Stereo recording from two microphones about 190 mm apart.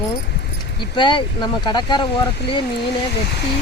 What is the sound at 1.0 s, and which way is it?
Speech, 25° left (ahead or behind).